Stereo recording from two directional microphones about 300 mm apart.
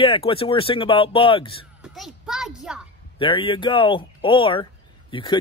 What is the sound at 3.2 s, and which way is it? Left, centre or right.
Speech, centre.